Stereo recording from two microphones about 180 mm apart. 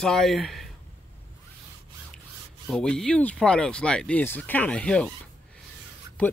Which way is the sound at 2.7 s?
5° left (ahead or behind).